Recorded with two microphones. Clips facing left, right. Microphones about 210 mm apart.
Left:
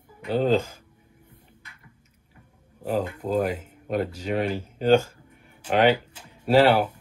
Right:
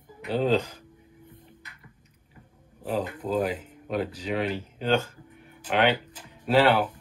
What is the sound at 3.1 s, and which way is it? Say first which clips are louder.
Speech: left 2 dB; 10° left (ahead or behind).